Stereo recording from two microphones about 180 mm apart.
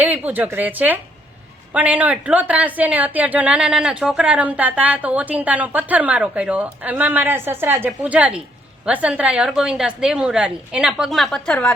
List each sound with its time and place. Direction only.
0.0 s a woman's voice: 10° right (ahead or behind)